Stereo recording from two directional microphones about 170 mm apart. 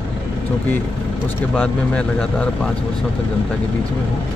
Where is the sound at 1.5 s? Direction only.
5° left (ahead or behind).